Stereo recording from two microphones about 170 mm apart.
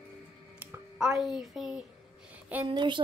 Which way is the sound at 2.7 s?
25° right (ahead or behind).